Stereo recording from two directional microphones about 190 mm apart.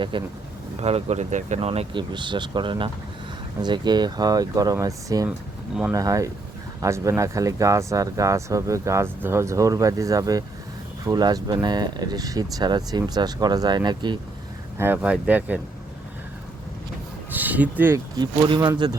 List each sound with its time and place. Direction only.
0.1 s speech: 25° right (ahead or behind)
14.8 s speech: 10° right (ahead or behind)
17.3 s speech: 10° right (ahead or behind)
18.2 s speech: 25° right (ahead or behind)